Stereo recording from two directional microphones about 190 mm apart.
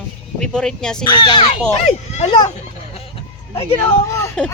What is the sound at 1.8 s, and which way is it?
Speech, 35° left (ahead or behind).